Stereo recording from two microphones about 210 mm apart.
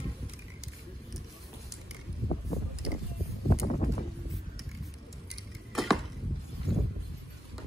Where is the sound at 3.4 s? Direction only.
35° left (ahead or behind).